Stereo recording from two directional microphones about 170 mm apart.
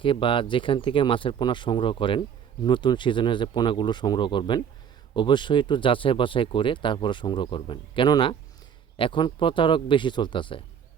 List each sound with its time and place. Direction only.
0.0 s speech: 30° left (ahead or behind)